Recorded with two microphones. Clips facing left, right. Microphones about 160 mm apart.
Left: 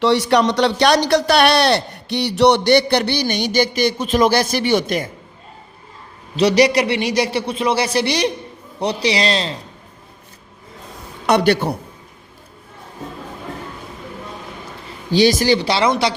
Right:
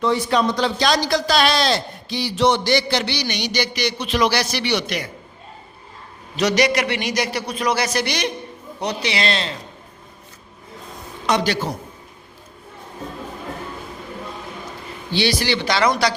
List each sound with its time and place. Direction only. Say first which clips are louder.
0.0 s a man's voice: left 4 dB; 75° left (ahead or behind); by 5.1 s 45° left (ahead or behind)
6.3 s a man's voice: left 5 dB; 30° left (ahead or behind)
11.3 s a man's voice: left 5 dB; 60° left (ahead or behind)
15.1 s a man's voice: left 7 dB; 45° left (ahead or behind); by 16.1 s 25° left (ahead or behind)